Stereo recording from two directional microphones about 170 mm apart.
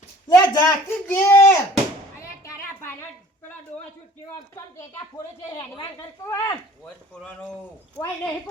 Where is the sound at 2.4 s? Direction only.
15° left (ahead or behind).